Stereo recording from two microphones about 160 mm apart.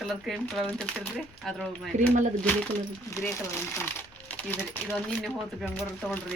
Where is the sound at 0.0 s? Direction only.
Centre (ahead or behind).